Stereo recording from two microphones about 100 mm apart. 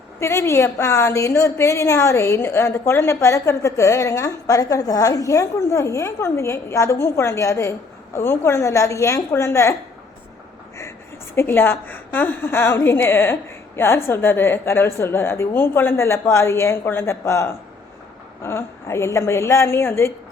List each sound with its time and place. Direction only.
0.2 s a woman's voice: 30° left (ahead or behind)
11.3 s a woman's voice: 20° left (ahead or behind)